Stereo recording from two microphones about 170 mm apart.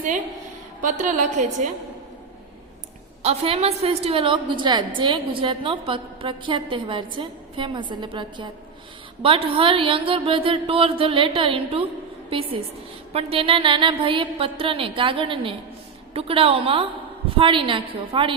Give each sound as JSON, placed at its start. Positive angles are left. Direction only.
{"t": 0.8, "sound": "a woman's voice", "side_deg": -50}
{"t": 3.2, "sound": "a woman's voice", "side_deg": -35}